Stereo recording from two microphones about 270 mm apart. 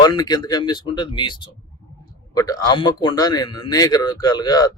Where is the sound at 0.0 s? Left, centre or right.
Centre.